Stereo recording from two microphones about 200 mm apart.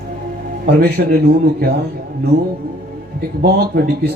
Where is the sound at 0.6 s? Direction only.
55° right (ahead or behind).